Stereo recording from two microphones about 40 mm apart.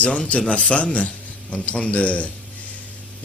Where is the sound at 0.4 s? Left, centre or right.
Left.